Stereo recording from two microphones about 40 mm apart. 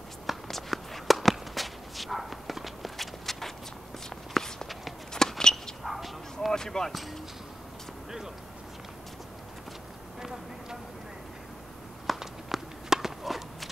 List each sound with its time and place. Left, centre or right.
0.3 s walk: centre
5.4 s a sound: centre
5.9 s clip-clop: centre
6.5 s speech: centre
12.2 s walk: centre